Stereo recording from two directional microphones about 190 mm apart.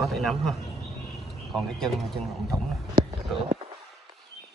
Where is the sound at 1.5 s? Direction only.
Centre (ahead or behind).